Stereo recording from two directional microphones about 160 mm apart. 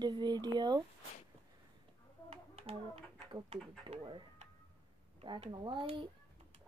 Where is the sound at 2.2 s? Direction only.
40° right (ahead or behind).